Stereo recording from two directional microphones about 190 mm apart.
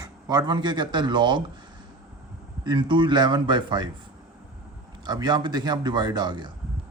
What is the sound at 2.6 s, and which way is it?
Speech, 25° right (ahead or behind).